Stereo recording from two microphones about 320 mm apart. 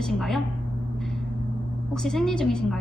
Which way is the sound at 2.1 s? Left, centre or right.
Centre.